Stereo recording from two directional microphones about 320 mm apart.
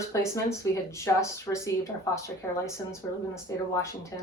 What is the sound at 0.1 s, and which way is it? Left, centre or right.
Speech, centre.